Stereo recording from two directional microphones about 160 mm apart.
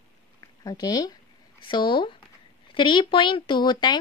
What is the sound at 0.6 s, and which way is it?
A woman's voice, 25° left (ahead or behind).